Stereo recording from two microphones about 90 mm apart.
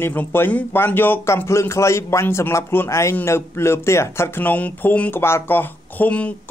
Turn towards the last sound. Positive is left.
turn(degrees=15)  # may be behind; listen again after turning